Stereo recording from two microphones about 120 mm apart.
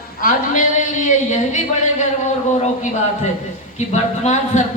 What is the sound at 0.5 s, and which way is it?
Speech, 90° left.